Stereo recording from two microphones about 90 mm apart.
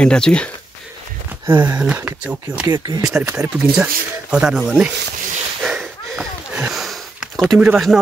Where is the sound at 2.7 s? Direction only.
50° right (ahead or behind).